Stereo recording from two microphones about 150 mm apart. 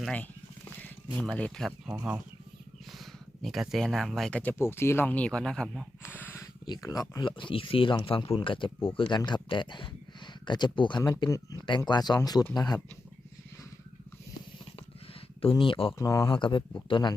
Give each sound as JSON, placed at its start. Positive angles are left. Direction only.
{"t": 0.0, "sound": "speech", "side_deg": 10}
{"t": 3.0, "sound": "speech", "side_deg": 0}
{"t": 6.1, "sound": "a sound", "side_deg": 15}
{"t": 6.7, "sound": "speech", "side_deg": 25}
{"t": 15.6, "sound": "speech", "side_deg": 35}
{"t": 16.0, "sound": "speech", "side_deg": 20}
{"t": 16.3, "sound": "speech", "side_deg": 30}